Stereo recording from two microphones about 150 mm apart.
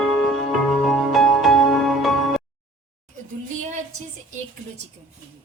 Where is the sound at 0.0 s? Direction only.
Centre (ahead or behind).